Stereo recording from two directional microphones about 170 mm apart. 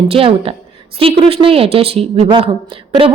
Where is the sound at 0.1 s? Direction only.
35° right (ahead or behind).